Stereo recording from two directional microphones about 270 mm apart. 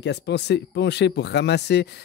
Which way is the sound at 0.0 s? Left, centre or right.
Left.